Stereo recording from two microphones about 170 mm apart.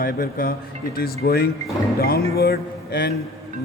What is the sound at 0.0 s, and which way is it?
Speech, 60° left (ahead or behind).